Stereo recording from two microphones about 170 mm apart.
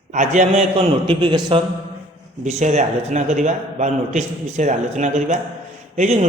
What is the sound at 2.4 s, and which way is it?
A man's voice, 45° right (ahead or behind).